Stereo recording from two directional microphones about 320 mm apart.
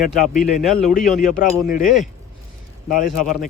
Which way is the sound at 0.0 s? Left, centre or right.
Centre.